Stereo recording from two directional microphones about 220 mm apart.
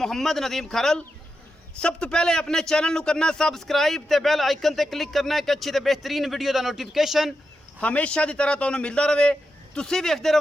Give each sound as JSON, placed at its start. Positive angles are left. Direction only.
{"t": 0.0, "sound": "a man's voice", "side_deg": 0}